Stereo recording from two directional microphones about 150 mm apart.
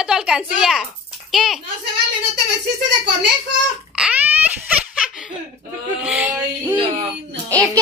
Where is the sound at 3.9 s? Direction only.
5° right (ahead or behind).